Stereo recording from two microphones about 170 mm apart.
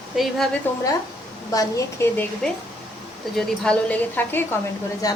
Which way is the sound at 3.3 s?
5° left (ahead or behind).